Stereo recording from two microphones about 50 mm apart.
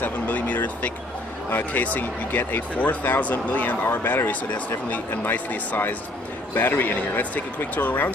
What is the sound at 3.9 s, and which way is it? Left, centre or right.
Speech, left.